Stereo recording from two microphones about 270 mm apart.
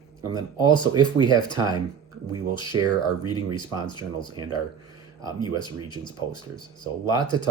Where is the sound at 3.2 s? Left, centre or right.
Centre.